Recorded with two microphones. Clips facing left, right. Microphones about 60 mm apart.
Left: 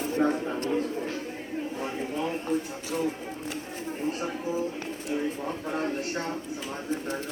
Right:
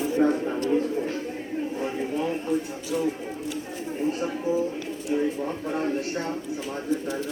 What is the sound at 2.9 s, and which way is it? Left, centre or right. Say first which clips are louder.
Speech: right 3 dB; left.